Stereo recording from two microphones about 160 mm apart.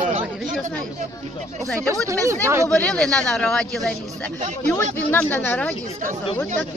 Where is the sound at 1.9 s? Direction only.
20° right (ahead or behind).